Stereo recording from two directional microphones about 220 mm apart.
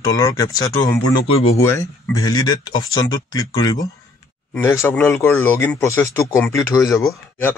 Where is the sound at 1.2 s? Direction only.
25° left (ahead or behind).